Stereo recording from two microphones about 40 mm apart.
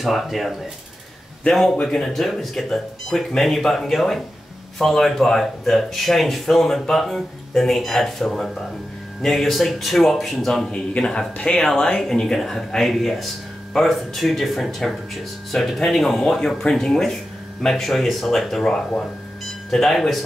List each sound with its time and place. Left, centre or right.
0.0 s speech: centre
1.5 s speech: centre
10.7 s speech: left
11.8 s speech: centre